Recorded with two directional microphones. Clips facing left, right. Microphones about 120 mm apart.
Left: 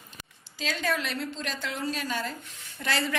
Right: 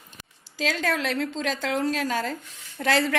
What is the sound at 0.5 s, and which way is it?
A woman's voice, 90° right.